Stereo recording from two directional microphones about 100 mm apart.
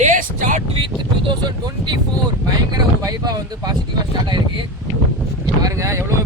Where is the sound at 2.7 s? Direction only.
40° right (ahead or behind).